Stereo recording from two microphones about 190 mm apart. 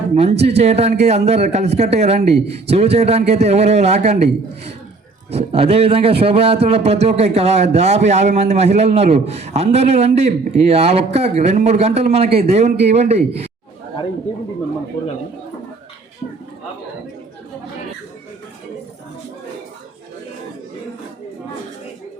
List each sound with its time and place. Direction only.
0.1 s a man's voice: 35° right (ahead or behind)